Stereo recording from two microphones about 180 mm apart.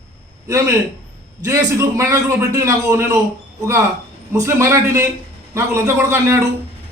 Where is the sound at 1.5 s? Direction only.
15° right (ahead or behind).